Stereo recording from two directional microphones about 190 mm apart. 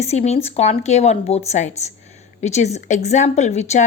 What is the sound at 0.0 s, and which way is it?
A woman's voice, 35° left (ahead or behind).